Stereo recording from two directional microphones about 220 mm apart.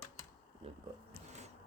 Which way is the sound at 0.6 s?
25° right (ahead or behind).